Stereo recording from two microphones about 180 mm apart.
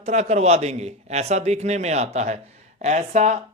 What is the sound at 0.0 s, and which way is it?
A man's voice, 40° right (ahead or behind).